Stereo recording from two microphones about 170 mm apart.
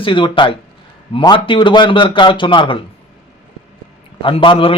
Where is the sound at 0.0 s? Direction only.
30° left (ahead or behind).